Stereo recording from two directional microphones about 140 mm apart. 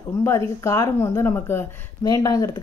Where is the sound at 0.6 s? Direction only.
20° left (ahead or behind).